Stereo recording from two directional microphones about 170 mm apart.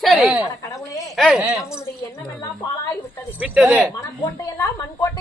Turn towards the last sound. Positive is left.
turn(degrees=20)  # may be behind; listen again after turning